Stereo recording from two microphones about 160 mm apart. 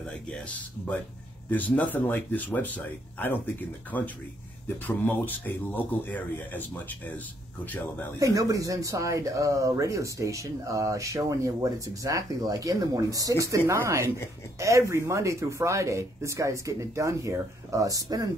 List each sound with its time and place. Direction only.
0.1 s speech: 10° left (ahead or behind)
8.2 s speech: 20° right (ahead or behind)